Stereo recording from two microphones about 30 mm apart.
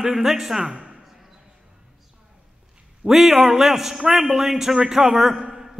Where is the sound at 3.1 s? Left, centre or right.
Centre.